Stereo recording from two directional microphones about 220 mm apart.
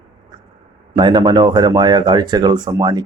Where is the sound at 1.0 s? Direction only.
20° right (ahead or behind).